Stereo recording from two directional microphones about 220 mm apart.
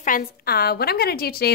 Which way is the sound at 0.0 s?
40° left (ahead or behind).